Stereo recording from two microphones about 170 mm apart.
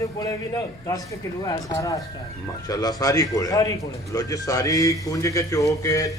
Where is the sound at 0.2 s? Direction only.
20° left (ahead or behind).